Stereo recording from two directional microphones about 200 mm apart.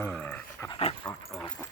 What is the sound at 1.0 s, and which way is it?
Dog, 5° left (ahead or behind).